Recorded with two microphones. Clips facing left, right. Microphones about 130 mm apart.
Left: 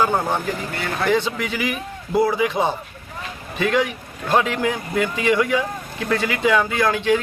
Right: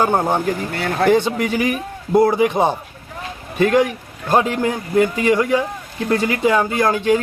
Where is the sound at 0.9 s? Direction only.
45° right (ahead or behind).